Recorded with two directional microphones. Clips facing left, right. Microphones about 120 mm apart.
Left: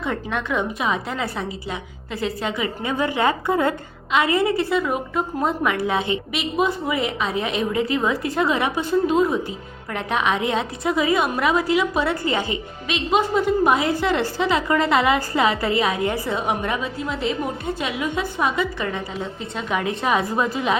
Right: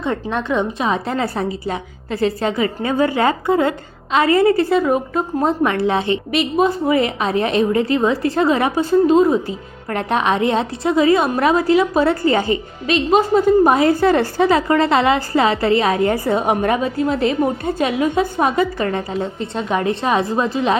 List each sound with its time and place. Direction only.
0.0 s a woman's voice: 30° right (ahead or behind)
4.2 s a woman's voice: 40° right (ahead or behind)
6.0 s a woman's voice: 15° left (ahead or behind)
6.6 s a woman's voice: 40° right (ahead or behind)
14.7 s a woman's voice: 30° right (ahead or behind)
15.8 s a woman's voice: 45° right (ahead or behind)
19.5 s a woman's voice: 30° right (ahead or behind)